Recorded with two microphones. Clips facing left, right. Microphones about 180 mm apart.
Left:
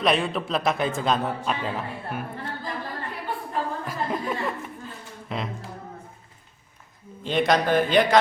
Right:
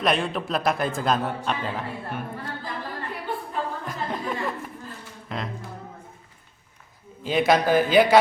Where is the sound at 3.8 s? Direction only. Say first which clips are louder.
Left 2 dB; 5° left (ahead or behind).